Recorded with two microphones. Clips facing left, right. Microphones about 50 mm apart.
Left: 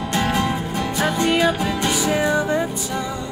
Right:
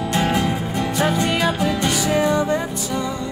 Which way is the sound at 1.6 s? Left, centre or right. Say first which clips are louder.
Right 1 dB; centre.